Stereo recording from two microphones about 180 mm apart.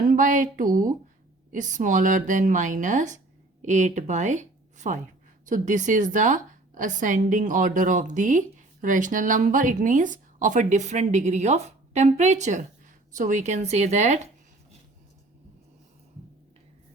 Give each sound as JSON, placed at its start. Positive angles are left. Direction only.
{"t": 0.1, "sound": "a woman's voice", "side_deg": -45}